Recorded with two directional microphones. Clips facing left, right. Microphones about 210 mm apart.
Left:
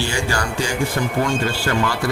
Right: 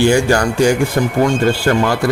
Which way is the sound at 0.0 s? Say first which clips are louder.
Right 11 dB; 50° right (ahead or behind).